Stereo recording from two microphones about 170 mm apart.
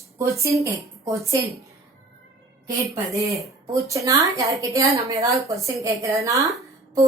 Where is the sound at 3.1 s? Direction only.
20° right (ahead or behind).